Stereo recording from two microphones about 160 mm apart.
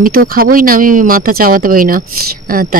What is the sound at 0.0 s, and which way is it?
Speech, 65° right (ahead or behind).